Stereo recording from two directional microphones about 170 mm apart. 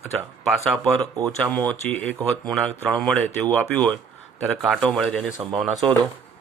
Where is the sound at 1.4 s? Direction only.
10° left (ahead or behind).